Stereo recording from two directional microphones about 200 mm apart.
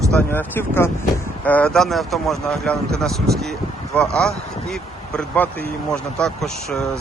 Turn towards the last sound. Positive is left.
turn(degrees=0)  # may be behind; listen again after turning